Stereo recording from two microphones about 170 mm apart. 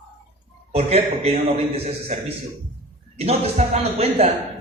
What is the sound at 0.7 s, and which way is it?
Speech, 40° right (ahead or behind).